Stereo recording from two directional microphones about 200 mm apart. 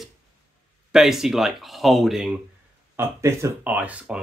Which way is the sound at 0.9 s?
Centre (ahead or behind).